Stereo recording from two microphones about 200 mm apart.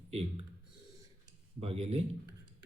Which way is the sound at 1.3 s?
30° right (ahead or behind).